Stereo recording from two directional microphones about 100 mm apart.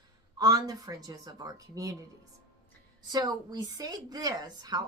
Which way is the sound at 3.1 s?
40° right (ahead or behind).